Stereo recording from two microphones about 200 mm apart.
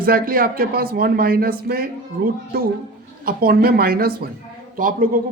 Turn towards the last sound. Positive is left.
turn(degrees=-45)  # may be behind; listen again after turning